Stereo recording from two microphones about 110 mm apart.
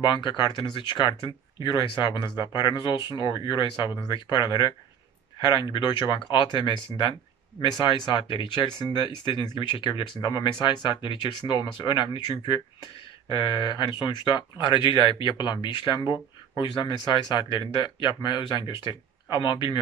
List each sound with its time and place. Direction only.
0.0 s speech: 45° left (ahead or behind)